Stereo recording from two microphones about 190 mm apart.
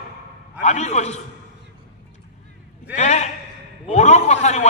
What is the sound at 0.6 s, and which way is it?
Speech, 35° left (ahead or behind).